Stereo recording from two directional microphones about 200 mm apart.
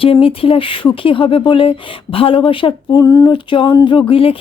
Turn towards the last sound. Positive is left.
turn(degrees=25)  # may be behind; listen again after turning